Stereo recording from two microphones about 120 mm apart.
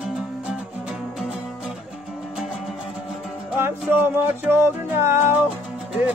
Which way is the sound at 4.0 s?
20° right (ahead or behind).